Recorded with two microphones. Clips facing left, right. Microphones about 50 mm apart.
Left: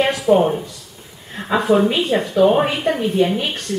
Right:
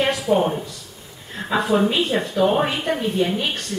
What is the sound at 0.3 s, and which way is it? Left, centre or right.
Speech, left.